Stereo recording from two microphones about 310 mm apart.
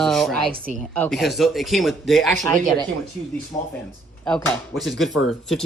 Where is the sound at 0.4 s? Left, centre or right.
Right.